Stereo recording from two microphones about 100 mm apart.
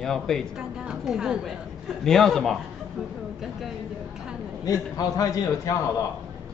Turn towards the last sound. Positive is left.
turn(degrees=35)  # may be behind; listen again after turning